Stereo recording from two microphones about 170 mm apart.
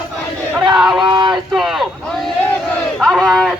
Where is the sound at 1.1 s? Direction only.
25° right (ahead or behind).